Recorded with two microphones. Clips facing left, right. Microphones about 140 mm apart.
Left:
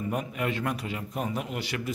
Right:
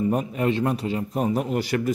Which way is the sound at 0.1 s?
35° right (ahead or behind).